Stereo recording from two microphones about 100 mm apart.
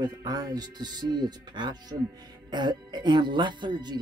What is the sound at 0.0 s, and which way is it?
Speech, 40° right (ahead or behind).